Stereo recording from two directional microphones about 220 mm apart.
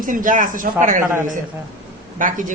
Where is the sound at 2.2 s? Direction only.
35° right (ahead or behind).